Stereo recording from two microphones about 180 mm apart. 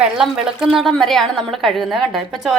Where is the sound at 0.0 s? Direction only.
5° right (ahead or behind).